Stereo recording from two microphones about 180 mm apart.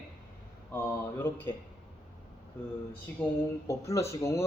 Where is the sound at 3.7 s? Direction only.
15° left (ahead or behind).